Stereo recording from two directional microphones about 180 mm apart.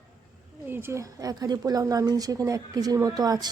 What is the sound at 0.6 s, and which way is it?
A woman's voice, 10° right (ahead or behind).